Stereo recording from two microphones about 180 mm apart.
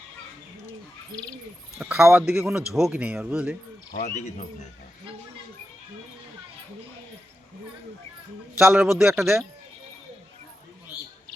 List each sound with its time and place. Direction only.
1.8 s speech: 5° right (ahead or behind)
4.0 s speech: 45° left (ahead or behind)
8.5 s speech: 10° right (ahead or behind)